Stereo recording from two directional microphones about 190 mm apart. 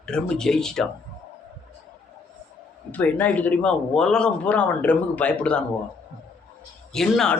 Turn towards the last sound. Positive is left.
turn(degrees=5)  # may be behind; listen again after turning